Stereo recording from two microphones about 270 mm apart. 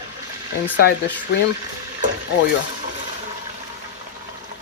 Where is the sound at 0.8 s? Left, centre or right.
Left.